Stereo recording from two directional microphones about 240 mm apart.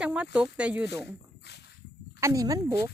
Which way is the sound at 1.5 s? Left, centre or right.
Left.